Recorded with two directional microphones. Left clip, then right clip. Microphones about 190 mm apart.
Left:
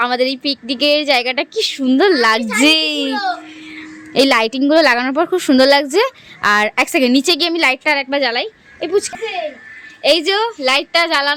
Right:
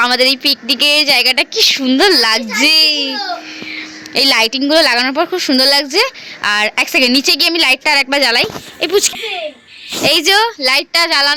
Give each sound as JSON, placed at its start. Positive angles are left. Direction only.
{"t": 0.0, "sound": "a woman's voice", "side_deg": 0}
{"t": 2.5, "sound": "a child's voice", "side_deg": 25}